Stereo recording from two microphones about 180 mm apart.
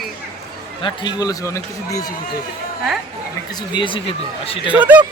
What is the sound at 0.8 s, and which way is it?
Speech, 25° left (ahead or behind).